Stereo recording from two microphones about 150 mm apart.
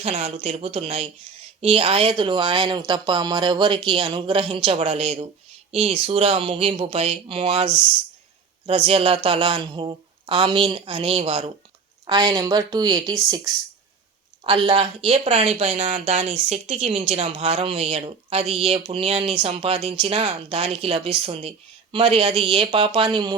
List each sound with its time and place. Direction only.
0.0 s speech: 45° right (ahead or behind)
12.0 s a woman's voice: 30° right (ahead or behind)
14.4 s speech: 40° right (ahead or behind)